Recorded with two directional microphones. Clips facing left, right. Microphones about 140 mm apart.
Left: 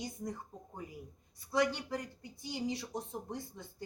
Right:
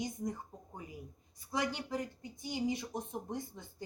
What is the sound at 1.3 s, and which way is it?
Speech, 15° right (ahead or behind).